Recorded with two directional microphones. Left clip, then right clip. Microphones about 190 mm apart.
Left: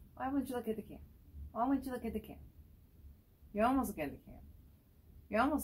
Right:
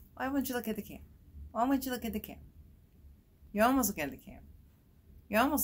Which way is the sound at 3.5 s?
40° right (ahead or behind).